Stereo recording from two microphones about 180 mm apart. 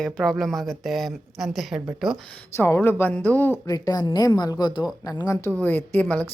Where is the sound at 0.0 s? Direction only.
Centre (ahead or behind).